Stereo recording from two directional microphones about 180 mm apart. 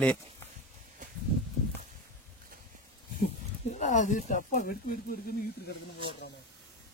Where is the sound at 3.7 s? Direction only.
45° left (ahead or behind).